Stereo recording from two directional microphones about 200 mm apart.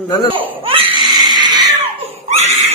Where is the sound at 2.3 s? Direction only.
35° right (ahead or behind).